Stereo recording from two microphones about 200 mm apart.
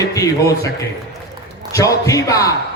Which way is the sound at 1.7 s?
15° left (ahead or behind).